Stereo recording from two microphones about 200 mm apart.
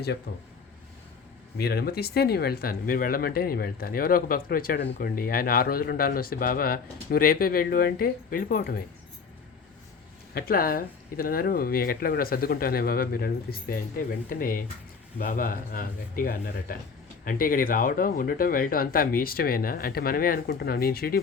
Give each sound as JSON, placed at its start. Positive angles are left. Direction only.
{"t": 0.3, "sound": "speech", "side_deg": 50}
{"t": 1.5, "sound": "speech", "side_deg": 50}
{"t": 10.3, "sound": "speech", "side_deg": 50}